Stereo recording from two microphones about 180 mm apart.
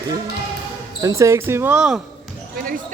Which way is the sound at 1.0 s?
15° right (ahead or behind).